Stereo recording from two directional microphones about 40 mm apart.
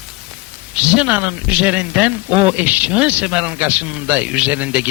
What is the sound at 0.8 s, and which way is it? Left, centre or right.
Speech, right.